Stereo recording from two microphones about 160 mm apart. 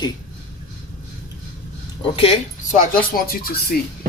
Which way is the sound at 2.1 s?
35° left (ahead or behind).